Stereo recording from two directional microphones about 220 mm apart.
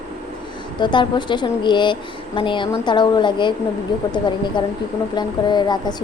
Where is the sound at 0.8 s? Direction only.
20° left (ahead or behind).